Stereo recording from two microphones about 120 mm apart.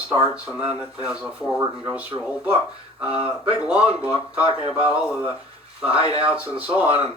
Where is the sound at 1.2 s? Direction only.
15° right (ahead or behind).